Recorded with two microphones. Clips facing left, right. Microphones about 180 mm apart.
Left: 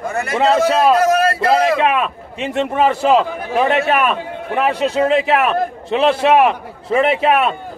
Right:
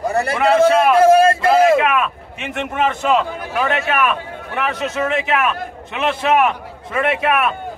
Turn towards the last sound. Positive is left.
turn(degrees=25)  # may be behind; listen again after turning